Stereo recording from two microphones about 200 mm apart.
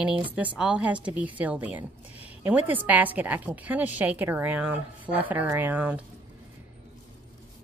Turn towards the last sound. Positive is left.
turn(degrees=-5)  # may be behind; listen again after turning